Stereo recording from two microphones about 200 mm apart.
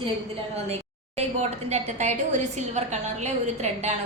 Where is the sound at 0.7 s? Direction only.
30° right (ahead or behind).